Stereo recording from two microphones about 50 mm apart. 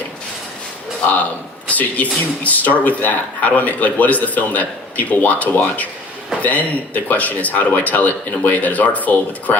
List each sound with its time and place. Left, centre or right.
1.7 s speech: left